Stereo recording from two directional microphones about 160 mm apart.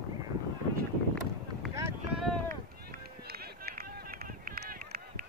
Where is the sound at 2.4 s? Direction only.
70° right (ahead or behind).